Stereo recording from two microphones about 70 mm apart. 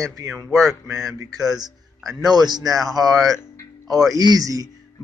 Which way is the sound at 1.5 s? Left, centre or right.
Right.